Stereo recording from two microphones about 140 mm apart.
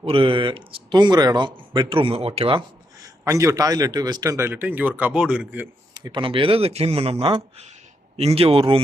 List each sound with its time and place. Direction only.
0.0 s speech: 40° right (ahead or behind)
3.2 s speech: 20° right (ahead or behind)
5.9 s speech: 30° right (ahead or behind)